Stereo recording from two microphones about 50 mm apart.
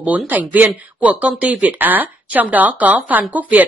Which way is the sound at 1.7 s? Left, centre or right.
Right.